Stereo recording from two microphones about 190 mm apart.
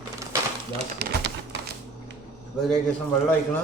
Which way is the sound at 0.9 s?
55° right (ahead or behind).